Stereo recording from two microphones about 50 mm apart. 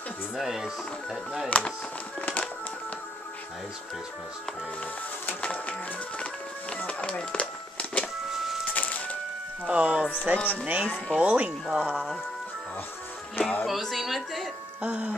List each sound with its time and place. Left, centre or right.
0.4 s speech: centre
1.5 s music: left
5.4 s music: left
8.3 s music: centre
8.7 s ice cream truck: left
9.7 s music: right
10.3 s speech: right
10.6 s music: right
11.7 s speech: centre
13.4 s music: left
13.7 s a woman's voice: centre
14.8 s music: right